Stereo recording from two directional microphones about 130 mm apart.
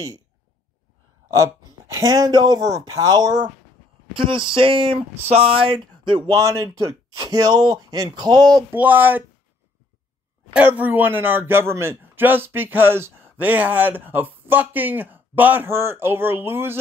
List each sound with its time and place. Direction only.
1.3 s speech: 25° right (ahead or behind)
8.7 s speech: 15° right (ahead or behind)
10.5 s speech: 15° right (ahead or behind)